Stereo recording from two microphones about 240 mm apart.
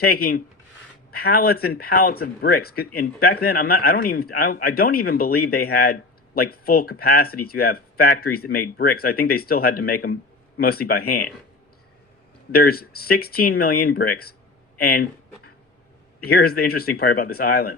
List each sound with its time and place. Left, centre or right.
0.0 s speech: left
12.5 s speech: left
16.2 s speech: left